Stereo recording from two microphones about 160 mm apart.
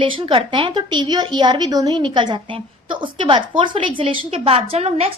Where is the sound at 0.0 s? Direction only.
30° right (ahead or behind).